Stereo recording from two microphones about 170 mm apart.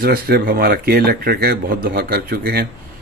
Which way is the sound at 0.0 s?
60° right (ahead or behind).